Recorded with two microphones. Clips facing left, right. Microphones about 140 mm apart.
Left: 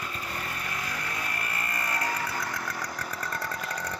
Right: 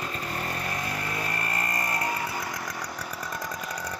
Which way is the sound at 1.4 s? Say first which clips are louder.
Right 3 dB; 40° right (ahead or behind).